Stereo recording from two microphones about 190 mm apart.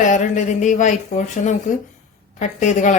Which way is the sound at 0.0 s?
40° left (ahead or behind).